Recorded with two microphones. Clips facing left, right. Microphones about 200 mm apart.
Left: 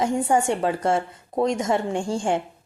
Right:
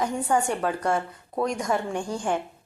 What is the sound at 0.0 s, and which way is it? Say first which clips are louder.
A woman's voice: left 3 dB; 25° left (ahead or behind).